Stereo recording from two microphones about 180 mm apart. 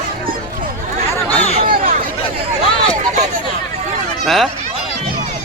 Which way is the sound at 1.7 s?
50° right (ahead or behind).